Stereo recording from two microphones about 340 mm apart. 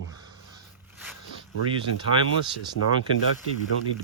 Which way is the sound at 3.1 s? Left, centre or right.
Left.